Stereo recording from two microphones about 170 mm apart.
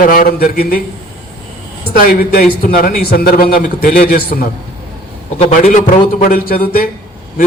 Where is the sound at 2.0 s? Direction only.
60° left (ahead or behind).